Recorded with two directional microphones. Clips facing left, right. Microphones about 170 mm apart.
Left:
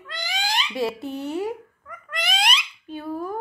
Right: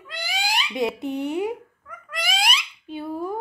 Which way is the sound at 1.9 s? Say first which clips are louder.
Even; centre (ahead or behind).